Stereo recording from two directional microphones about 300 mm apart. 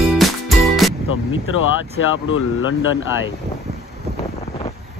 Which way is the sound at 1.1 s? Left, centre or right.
Left.